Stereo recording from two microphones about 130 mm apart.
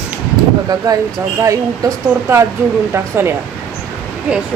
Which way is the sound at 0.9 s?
25° right (ahead or behind).